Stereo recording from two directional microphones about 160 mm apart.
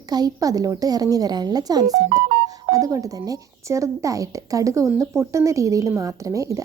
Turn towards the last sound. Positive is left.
turn(degrees=-20)  # may be behind; listen again after turning